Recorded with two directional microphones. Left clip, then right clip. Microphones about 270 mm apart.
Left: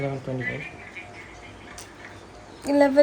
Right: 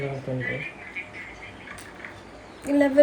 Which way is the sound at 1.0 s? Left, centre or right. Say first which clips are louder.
Right 4 dB; centre.